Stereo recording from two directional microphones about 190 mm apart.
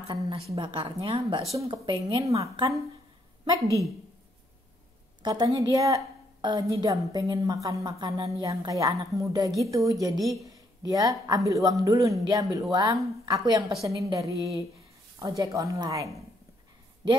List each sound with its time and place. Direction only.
0.5 s a woman's voice: 30° right (ahead or behind)
5.2 s a woman's voice: 20° right (ahead or behind)